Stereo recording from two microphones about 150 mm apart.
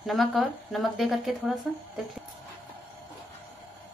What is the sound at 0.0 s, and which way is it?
Speech, centre (ahead or behind).